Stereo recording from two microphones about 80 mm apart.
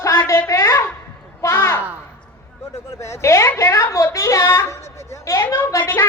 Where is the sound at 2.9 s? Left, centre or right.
Left.